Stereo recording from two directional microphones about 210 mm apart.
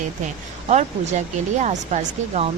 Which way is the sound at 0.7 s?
35° right (ahead or behind).